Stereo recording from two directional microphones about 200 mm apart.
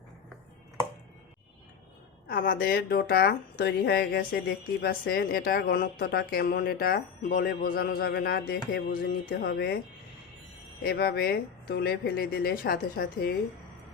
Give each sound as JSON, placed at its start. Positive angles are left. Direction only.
{"t": 2.2, "sound": "speech", "side_deg": 45}
{"t": 10.8, "sound": "speech", "side_deg": 50}